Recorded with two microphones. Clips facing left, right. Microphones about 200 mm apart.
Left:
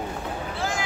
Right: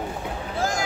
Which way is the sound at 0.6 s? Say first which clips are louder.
Right 5 dB; 40° right (ahead or behind).